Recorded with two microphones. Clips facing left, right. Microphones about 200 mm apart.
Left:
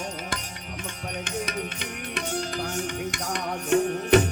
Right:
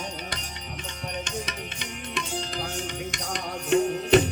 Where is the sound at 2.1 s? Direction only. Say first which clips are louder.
Left 3 dB; 60° left (ahead or behind).